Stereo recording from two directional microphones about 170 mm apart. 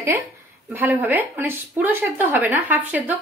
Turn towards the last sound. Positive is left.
turn(degrees=-10)  # may be behind; listen again after turning